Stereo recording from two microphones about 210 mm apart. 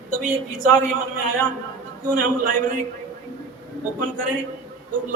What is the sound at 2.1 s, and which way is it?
Speech, 40° right (ahead or behind).